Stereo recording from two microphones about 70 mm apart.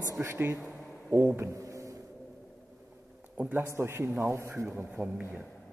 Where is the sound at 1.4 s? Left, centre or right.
Right.